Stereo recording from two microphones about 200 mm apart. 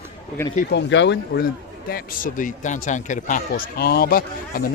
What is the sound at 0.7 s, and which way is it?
Speech, 60° left (ahead or behind).